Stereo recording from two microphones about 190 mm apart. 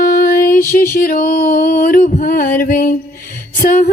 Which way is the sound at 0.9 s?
45° left (ahead or behind).